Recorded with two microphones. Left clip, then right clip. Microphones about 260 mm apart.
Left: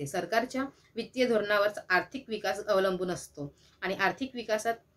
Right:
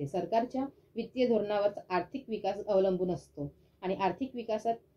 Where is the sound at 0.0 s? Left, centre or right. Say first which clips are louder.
Left 1 dB; centre.